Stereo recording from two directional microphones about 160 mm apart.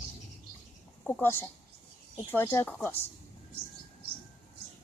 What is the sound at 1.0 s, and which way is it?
A woman's voice, 15° left (ahead or behind).